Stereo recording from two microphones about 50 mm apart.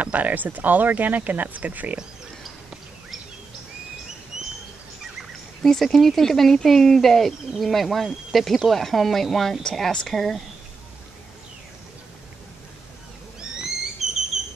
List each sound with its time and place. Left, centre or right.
0.0 s speech: right
4.3 s bird: centre
5.6 s speech: centre
14.3 s a sound: centre